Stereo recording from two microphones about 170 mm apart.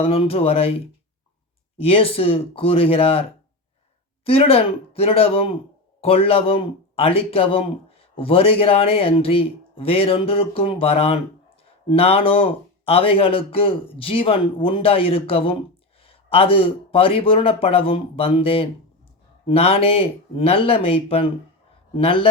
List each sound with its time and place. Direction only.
0.0 s speech: 35° left (ahead or behind)
1.8 s speech: 35° left (ahead or behind)
4.3 s speech: 35° left (ahead or behind)